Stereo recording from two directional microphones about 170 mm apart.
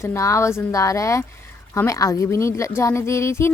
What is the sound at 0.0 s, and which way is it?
A woman's voice, 15° left (ahead or behind).